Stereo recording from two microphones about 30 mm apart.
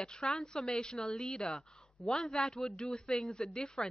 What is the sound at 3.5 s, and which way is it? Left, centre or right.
Speech, left.